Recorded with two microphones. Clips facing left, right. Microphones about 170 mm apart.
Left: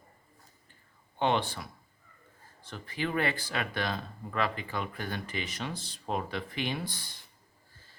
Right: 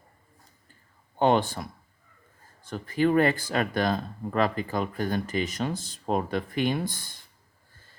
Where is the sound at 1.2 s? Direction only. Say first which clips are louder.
Right 6 dB; 45° right (ahead or behind).